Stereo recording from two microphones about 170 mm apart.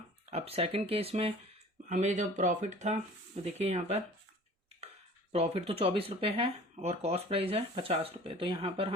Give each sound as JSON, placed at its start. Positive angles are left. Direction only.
{"t": 0.3, "sound": "speech", "side_deg": -35}
{"t": 1.9, "sound": "speech", "side_deg": -45}
{"t": 5.3, "sound": "speech", "side_deg": -35}